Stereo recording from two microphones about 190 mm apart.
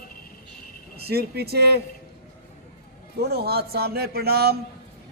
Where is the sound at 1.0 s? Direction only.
55° right (ahead or behind).